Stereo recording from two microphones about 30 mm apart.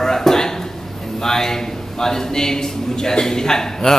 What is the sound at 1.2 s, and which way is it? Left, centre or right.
A man's voice, centre.